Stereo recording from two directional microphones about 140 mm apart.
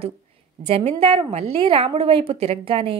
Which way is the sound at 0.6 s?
50° right (ahead or behind).